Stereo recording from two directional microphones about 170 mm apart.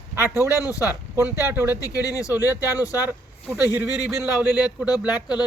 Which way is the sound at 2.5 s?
10° right (ahead or behind).